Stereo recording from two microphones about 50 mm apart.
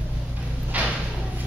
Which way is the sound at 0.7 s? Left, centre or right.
Right.